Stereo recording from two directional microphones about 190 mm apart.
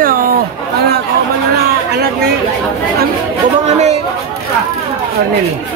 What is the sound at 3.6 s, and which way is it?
Speech, 35° right (ahead or behind).